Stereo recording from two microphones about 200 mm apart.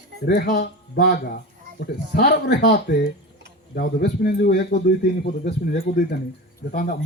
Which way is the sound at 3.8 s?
55° left (ahead or behind).